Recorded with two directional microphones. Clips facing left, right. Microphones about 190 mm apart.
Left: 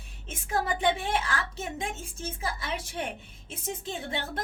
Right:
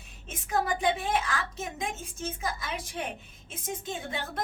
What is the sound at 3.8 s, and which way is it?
Speech, 30° left (ahead or behind).